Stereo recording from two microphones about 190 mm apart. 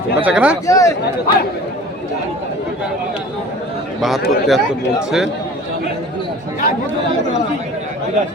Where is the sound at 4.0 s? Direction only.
Centre (ahead or behind).